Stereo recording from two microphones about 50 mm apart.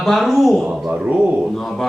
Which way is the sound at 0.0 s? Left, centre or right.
Centre.